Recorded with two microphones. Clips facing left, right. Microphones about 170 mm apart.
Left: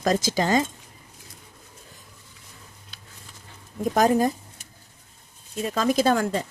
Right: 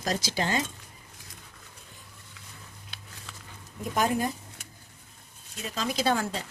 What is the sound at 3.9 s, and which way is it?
Speech, 40° left (ahead or behind).